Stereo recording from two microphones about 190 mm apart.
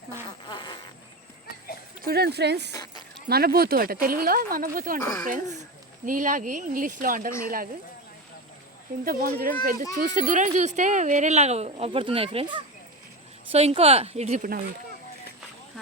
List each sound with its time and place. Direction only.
0.4 s fart: 25° left (ahead or behind)
2.0 s speech: 55° right (ahead or behind)
2.7 s keys jangling: 20° left (ahead or behind)
3.2 s speech: 55° right (ahead or behind)
4.9 s speech: 15° left (ahead or behind)
5.2 s speech: 40° right (ahead or behind)
9.0 s speech: 50° right (ahead or behind)